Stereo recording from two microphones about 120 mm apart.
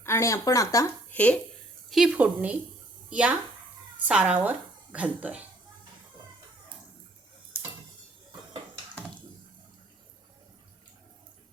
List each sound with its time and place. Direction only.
0.0 s speech: 25° left (ahead or behind)
1.1 s speech: 10° left (ahead or behind)
1.9 s a woman's voice: 5° right (ahead or behind)